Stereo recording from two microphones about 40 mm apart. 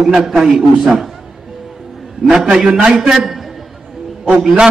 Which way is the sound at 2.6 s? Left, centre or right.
Centre.